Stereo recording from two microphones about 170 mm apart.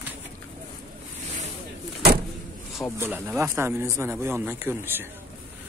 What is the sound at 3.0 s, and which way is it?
A man's voice, 15° right (ahead or behind).